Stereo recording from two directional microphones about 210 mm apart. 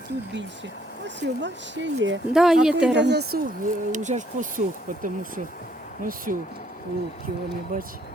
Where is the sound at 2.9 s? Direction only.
55° right (ahead or behind).